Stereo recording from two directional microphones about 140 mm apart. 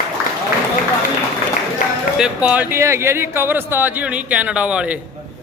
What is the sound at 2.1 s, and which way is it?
A man's voice, 5° right (ahead or behind).